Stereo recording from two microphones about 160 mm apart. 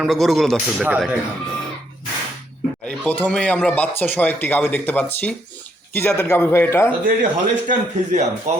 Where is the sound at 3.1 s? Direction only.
10° left (ahead or behind).